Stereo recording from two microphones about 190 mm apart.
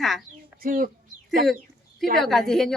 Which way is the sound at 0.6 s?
50° right (ahead or behind).